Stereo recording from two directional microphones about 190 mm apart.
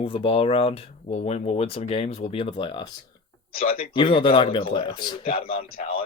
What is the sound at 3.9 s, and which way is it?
Speech, 25° left (ahead or behind).